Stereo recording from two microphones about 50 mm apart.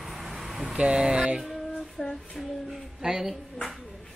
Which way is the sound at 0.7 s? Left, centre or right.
Centre.